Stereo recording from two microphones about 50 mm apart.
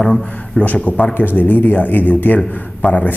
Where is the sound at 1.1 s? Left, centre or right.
Left.